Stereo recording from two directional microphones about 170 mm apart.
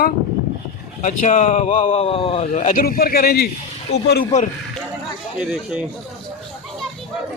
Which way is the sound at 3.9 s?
40° left (ahead or behind).